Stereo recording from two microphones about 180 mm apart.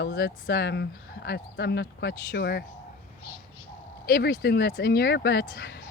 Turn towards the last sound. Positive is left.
turn(degrees=65)  # may be behind; listen again after turning